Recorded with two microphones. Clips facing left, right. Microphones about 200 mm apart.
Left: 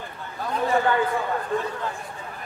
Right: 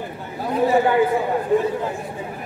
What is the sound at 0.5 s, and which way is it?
Speech, 10° right (ahead or behind).